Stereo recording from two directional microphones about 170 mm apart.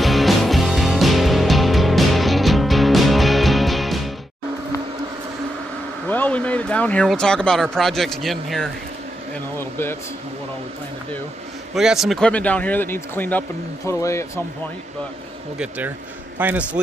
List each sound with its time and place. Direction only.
0.0 s music: centre (ahead or behind)
6.0 s a sound: 10° left (ahead or behind)
7.7 s speech: centre (ahead or behind)
9.6 s speech: 15° left (ahead or behind)
11.7 s speech: centre (ahead or behind); by 14.4 s 15° left (ahead or behind)
16.3 s a man's voice: 10° right (ahead or behind)